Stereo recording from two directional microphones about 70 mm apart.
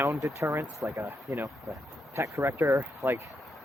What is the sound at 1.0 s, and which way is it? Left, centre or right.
Speech, right.